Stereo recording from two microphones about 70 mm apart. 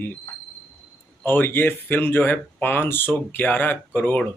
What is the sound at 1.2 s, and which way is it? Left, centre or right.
Speech, left.